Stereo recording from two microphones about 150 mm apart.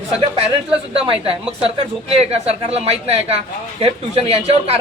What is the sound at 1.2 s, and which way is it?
A man's voice, 40° right (ahead or behind).